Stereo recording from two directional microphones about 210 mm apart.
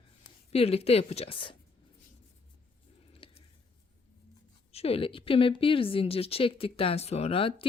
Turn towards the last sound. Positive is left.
turn(degrees=25)  # may be behind; listen again after turning